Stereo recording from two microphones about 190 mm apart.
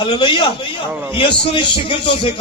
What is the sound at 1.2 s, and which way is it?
A man's voice, 25° left (ahead or behind).